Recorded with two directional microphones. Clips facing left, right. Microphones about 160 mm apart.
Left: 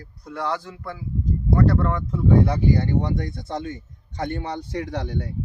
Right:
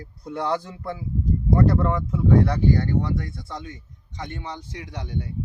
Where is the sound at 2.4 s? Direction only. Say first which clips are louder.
Even; 10° left (ahead or behind); by 3.8 s 30° left (ahead or behind).